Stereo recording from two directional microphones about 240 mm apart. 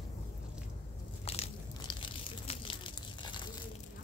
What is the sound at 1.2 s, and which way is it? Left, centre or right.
Crushing, left.